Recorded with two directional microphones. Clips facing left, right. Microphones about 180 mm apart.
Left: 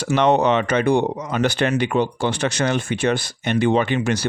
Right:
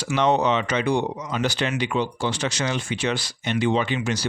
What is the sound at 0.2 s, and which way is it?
Speech, 60° left (ahead or behind).